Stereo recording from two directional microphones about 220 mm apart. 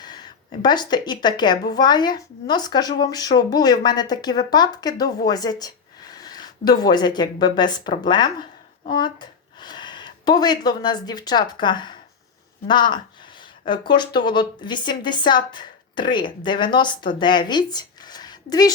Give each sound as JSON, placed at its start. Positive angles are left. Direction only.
{"t": 0.0, "sound": "a woman's voice", "side_deg": 20}